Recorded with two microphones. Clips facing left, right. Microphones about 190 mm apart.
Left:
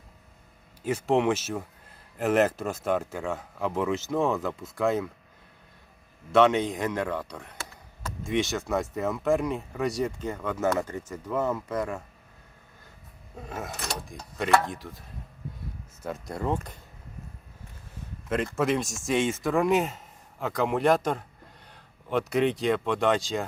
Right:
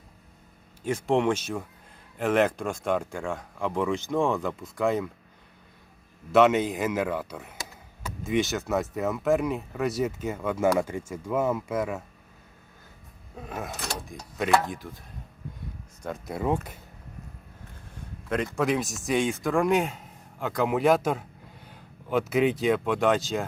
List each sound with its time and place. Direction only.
0.9 s speech: 5° left (ahead or behind)
6.3 s speech: 5° right (ahead or behind)
7.6 s chop: 15° right (ahead or behind)
8.2 s speech: centre (ahead or behind)
13.5 s speech: centre (ahead or behind)
16.0 s speech: 5° right (ahead or behind)
18.3 s speech: centre (ahead or behind)